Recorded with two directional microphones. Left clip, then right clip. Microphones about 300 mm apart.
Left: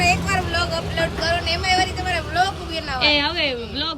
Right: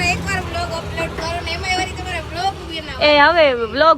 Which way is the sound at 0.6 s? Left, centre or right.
Centre.